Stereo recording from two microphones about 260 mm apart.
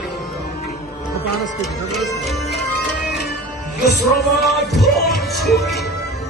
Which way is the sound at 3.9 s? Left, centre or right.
Left.